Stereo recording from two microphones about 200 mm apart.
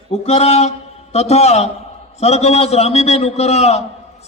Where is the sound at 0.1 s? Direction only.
30° left (ahead or behind).